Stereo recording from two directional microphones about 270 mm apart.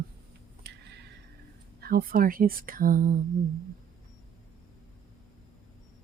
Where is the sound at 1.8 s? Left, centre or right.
Right.